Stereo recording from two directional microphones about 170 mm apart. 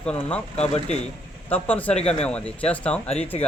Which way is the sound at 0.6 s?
40° left (ahead or behind).